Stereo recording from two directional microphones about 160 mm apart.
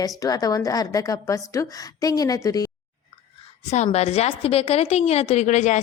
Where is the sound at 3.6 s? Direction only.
45° left (ahead or behind).